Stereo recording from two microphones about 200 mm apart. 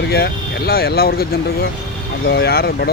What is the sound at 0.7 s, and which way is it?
Speech, 50° left (ahead or behind).